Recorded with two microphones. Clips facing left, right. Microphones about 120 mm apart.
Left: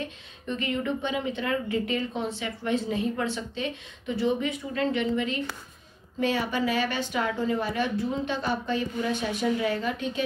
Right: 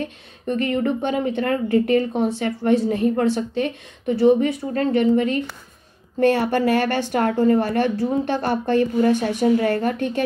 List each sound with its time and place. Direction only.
0.0 s a woman's voice: 50° right (ahead or behind)
6.1 s speech: 60° right (ahead or behind)